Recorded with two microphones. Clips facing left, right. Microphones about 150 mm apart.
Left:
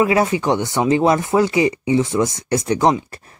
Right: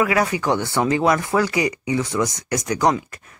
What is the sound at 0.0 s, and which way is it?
Speech, 25° left (ahead or behind).